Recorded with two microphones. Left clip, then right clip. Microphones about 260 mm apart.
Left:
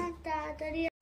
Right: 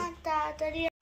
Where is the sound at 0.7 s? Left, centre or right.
Centre.